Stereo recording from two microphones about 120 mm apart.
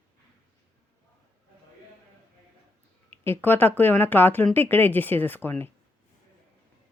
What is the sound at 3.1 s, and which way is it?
Speech, 20° left (ahead or behind).